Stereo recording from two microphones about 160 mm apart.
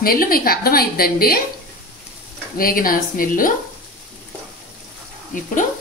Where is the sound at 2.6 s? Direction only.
65° left (ahead or behind).